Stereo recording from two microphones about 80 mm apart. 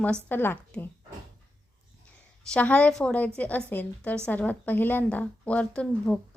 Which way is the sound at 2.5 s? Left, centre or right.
Centre.